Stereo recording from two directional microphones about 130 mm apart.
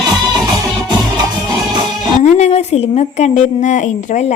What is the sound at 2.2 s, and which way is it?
A woman's voice, 60° left (ahead or behind).